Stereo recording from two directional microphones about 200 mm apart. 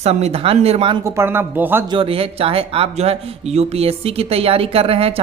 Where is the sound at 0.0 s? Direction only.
30° right (ahead or behind).